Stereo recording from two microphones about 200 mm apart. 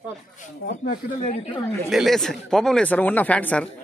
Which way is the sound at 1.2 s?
35° left (ahead or behind).